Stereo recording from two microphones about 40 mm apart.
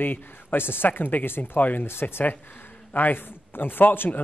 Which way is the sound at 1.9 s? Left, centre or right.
Left.